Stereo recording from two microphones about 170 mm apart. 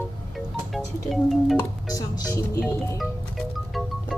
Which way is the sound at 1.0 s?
Centre (ahead or behind).